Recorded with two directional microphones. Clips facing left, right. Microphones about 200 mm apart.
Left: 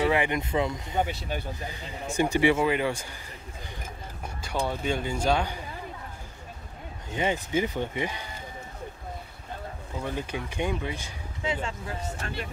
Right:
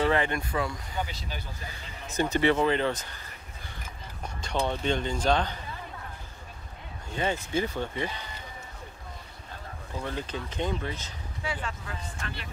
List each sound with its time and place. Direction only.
0.0 s speech: 15° left (ahead or behind)
1.3 s speech: 55° left (ahead or behind)
2.0 s speech: 15° left (ahead or behind)
4.4 s speech: 5° left (ahead or behind)
7.2 s speech: 15° left (ahead or behind)
10.0 s speech: 10° left (ahead or behind)
12.1 s speech: 40° left (ahead or behind)